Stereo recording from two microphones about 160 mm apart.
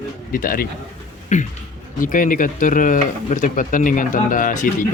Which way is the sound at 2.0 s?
55° left (ahead or behind).